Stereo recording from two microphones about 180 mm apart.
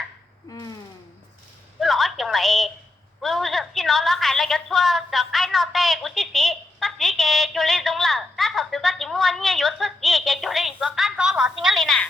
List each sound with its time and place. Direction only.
0.4 s a sound: 20° left (ahead or behind)
1.8 s telephone: centre (ahead or behind)
3.2 s a woman's voice: centre (ahead or behind)